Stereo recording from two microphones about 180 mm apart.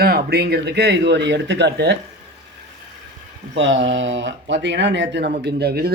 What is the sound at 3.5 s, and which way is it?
Speech, 90° right.